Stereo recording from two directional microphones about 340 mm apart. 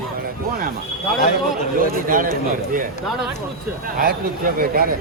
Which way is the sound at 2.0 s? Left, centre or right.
Right.